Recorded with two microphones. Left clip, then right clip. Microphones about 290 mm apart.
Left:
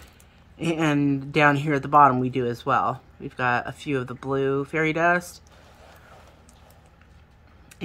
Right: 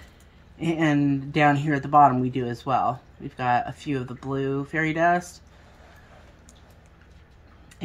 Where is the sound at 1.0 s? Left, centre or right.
Left.